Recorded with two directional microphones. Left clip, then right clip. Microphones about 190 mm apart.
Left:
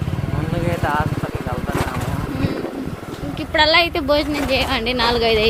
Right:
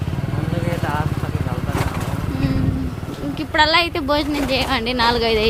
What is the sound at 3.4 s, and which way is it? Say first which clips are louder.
Speech: left 1 dB; 20° right (ahead or behind).